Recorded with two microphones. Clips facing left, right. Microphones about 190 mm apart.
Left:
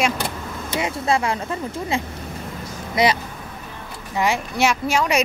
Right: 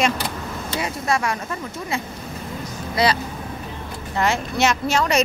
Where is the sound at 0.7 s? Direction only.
25° left (ahead or behind).